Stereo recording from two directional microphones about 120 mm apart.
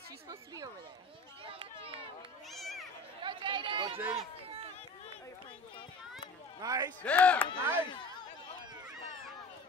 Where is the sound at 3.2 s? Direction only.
45° right (ahead or behind).